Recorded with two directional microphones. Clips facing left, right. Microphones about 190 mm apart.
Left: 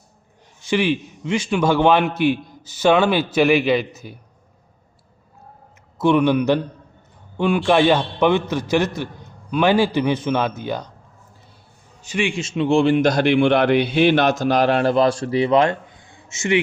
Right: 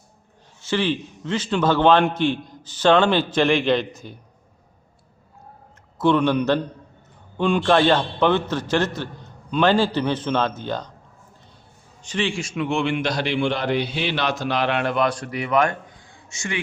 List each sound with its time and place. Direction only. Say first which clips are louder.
0.6 s a man's voice: left 3 dB; 15° left (ahead or behind)
6.0 s a man's voice: left 2 dB; 10° left (ahead or behind)
12.0 s a man's voice: left 2 dB; 10° left (ahead or behind)
12.4 s a man's voice: left 6 dB; 25° left (ahead or behind)